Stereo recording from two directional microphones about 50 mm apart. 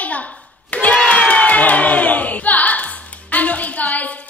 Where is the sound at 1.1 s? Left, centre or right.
Left.